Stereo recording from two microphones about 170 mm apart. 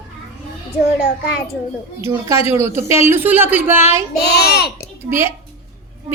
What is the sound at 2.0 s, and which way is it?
A woman's voice, 15° right (ahead or behind).